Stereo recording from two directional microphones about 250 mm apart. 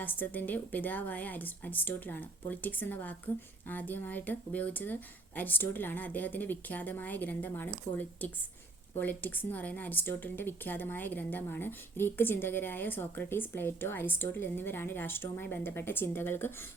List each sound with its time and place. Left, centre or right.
0.0 s a woman's voice: centre